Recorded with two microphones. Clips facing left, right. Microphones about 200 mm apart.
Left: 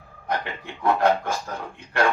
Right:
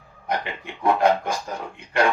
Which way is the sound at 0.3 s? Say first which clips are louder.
Right 1 dB; 15° right (ahead or behind).